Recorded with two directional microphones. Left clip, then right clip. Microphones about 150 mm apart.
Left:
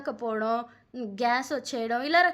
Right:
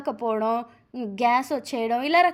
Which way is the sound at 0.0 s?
20° right (ahead or behind).